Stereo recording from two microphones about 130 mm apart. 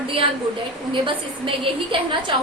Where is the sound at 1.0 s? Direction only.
40° right (ahead or behind).